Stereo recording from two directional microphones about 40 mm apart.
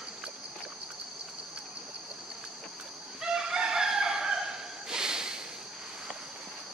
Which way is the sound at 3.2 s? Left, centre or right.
Centre.